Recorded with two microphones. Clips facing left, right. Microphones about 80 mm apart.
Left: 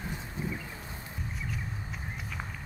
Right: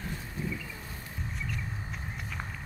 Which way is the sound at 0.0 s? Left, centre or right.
Left.